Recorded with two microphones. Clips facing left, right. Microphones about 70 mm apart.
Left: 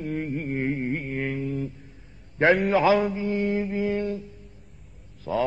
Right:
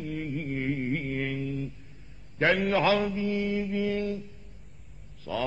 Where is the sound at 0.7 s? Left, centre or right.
Left.